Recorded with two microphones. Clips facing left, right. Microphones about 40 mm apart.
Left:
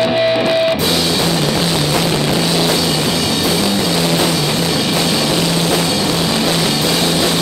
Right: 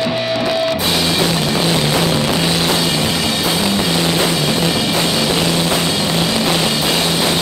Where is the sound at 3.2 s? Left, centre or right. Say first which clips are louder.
Left 1 dB; right.